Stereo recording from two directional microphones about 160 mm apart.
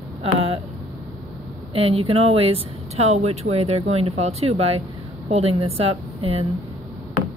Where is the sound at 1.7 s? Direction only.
35° right (ahead or behind).